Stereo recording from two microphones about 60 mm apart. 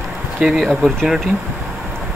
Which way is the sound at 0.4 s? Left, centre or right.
Centre.